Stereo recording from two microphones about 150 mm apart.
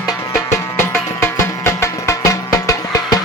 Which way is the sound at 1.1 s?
20° left (ahead or behind).